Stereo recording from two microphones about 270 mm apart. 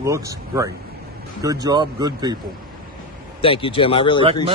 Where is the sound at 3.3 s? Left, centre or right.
Centre.